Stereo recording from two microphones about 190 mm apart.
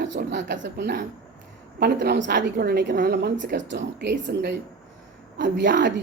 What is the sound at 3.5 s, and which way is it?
Speech, 70° right (ahead or behind).